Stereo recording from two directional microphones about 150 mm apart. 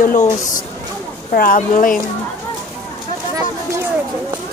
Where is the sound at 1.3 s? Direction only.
70° left (ahead or behind).